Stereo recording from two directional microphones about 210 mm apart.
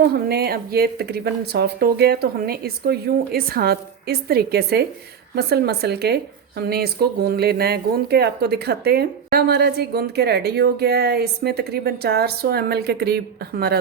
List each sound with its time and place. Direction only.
0.0 s speech: 50° right (ahead or behind)